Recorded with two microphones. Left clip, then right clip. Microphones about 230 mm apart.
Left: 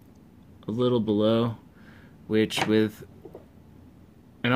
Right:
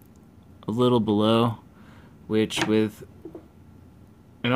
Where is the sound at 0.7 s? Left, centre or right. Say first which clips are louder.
Right 3 dB; centre.